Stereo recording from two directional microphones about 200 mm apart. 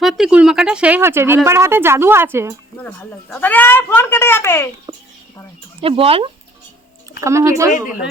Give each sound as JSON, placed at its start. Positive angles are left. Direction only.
{"t": 0.0, "sound": "speech", "side_deg": 0}
{"t": 2.7, "sound": "speech", "side_deg": 5}
{"t": 5.8, "sound": "speech", "side_deg": -30}
{"t": 7.2, "sound": "speech", "side_deg": -15}